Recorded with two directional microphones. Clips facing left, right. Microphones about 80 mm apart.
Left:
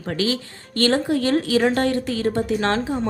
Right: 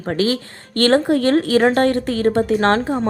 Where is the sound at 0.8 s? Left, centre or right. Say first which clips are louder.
Right 5 dB; right.